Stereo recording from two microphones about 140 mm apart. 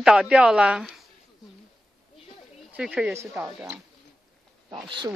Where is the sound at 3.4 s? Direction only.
5° right (ahead or behind).